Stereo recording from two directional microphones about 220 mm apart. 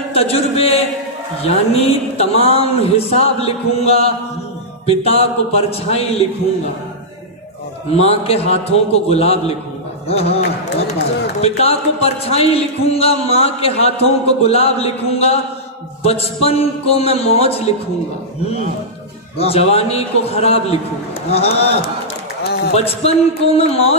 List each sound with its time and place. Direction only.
0.1 s a man's voice: 25° left (ahead or behind)
7.9 s a man's voice: 25° left (ahead or behind)
11.4 s a man's voice: 25° left (ahead or behind)
19.3 s a man's voice: 25° left (ahead or behind)
22.4 s a sound: 50° left (ahead or behind)
22.8 s a man's voice: 30° left (ahead or behind)